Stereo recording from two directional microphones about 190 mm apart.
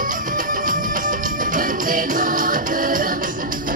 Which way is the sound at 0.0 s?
45° right (ahead or behind).